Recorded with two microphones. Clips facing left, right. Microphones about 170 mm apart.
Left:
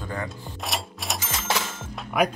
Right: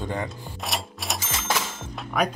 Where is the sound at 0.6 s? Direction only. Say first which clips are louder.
Even; centre (ahead or behind).